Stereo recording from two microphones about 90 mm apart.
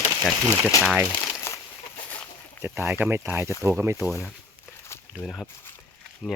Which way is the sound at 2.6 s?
25° right (ahead or behind).